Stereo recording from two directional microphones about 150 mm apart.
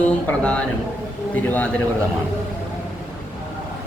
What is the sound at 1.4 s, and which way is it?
Speech, 10° left (ahead or behind).